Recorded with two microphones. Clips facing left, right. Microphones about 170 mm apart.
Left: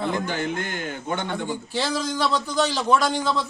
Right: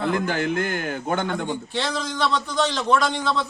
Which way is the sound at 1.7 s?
5° left (ahead or behind).